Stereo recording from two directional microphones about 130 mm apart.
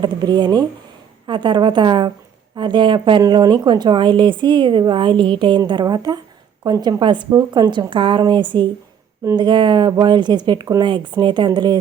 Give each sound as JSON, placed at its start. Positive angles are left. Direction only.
{"t": 0.0, "sound": "a woman's voice", "side_deg": -35}